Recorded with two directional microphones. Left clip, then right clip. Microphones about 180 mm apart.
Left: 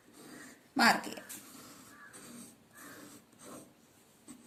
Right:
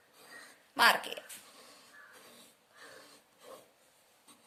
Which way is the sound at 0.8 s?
40° right (ahead or behind).